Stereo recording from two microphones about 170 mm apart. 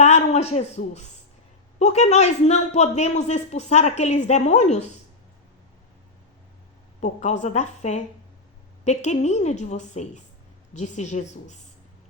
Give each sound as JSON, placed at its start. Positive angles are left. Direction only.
{"t": 0.0, "sound": "a man's voice", "side_deg": 40}
{"t": 7.0, "sound": "a woman's voice", "side_deg": 45}